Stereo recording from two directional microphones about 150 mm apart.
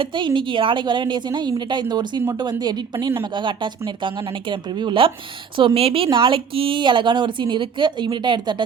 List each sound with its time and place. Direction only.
0.0 s a woman's voice: 30° right (ahead or behind)